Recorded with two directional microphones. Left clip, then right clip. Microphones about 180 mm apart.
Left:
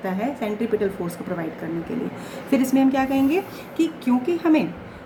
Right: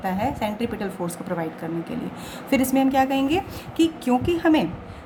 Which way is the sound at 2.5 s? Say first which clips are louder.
Left 1 dB; 55° right (ahead or behind).